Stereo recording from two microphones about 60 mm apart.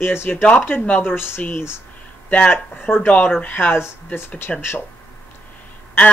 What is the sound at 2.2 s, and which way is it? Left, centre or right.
Speech, left.